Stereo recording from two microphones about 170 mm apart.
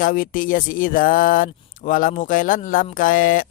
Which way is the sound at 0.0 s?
55° left (ahead or behind).